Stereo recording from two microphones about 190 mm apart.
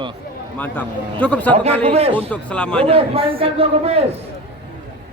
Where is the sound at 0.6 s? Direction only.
10° left (ahead or behind).